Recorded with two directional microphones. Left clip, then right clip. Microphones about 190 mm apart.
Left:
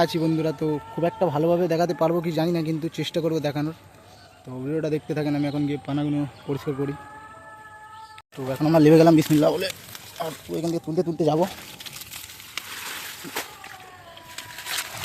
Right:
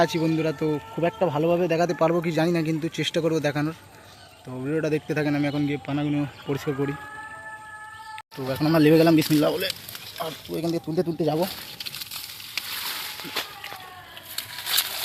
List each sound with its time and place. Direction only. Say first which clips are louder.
0.0 s a man's voice: even; 10° left (ahead or behind)
8.4 s a man's voice: even; centre (ahead or behind)
8.6 s speech: left 3 dB; 15° left (ahead or behind)